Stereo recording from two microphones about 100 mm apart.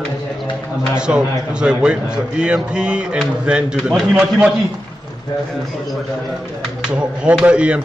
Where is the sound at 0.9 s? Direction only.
10° right (ahead or behind).